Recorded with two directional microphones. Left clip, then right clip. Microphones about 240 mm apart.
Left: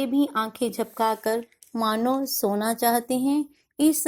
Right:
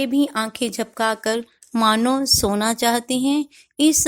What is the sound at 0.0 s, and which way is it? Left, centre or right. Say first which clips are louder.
Speech: right 3 dB; right.